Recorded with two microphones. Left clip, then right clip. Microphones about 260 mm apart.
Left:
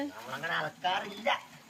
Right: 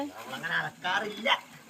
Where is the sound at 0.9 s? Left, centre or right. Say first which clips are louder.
Right 3 dB; right.